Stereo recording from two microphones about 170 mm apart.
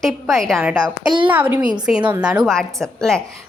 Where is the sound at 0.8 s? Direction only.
25° right (ahead or behind).